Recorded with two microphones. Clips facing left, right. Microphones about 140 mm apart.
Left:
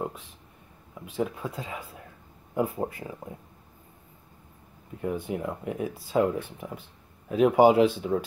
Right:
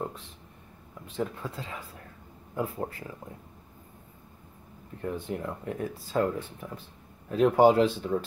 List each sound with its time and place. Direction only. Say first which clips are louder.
0.9 s speech: left 3 dB; 10° left (ahead or behind)
5.0 s speech: left 3 dB; 10° left (ahead or behind)